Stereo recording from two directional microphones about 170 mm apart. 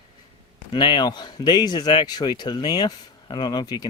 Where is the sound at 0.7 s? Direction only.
30° left (ahead or behind).